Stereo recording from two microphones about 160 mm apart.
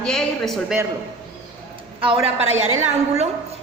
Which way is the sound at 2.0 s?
40° right (ahead or behind).